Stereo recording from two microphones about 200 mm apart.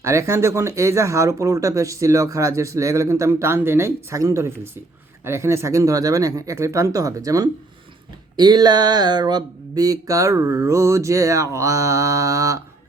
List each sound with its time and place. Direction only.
0.0 s speech: 15° right (ahead or behind)